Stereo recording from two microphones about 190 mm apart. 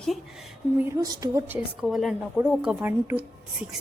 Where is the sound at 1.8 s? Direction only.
Centre (ahead or behind).